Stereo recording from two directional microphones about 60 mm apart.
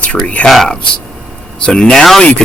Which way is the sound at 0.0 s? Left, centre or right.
Left.